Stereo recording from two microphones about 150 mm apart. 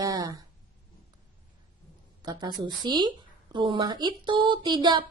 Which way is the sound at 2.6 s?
30° right (ahead or behind).